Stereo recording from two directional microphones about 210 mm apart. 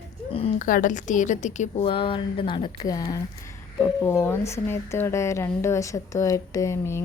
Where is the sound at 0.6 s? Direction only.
40° left (ahead or behind).